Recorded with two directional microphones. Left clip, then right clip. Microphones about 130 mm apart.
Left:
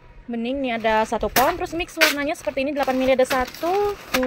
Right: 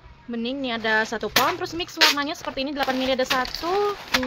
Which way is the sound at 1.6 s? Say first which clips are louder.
Left 1 dB; 20° left (ahead or behind).